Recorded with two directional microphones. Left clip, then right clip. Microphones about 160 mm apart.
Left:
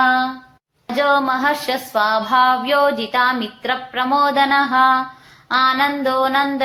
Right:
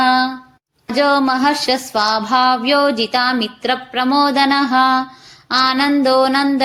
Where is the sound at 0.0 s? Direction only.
45° right (ahead or behind).